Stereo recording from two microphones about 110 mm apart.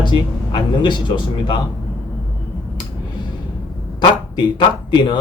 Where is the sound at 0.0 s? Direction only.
45° left (ahead or behind).